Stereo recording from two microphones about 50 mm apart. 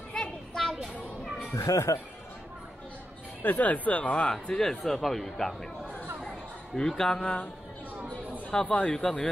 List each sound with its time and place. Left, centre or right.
0.1 s children playing: centre
1.5 s speech: left
3.4 s speech: left
4.3 s speech: centre
6.9 s speech: centre
8.5 s a man's voice: left
8.9 s speech: centre